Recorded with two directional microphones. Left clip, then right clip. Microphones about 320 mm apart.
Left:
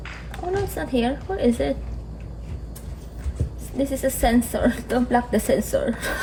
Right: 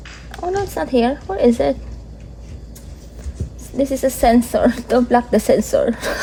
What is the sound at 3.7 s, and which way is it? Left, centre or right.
A woman's voice, right.